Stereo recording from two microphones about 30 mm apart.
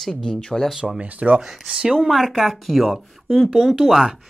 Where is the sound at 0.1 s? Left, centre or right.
Left.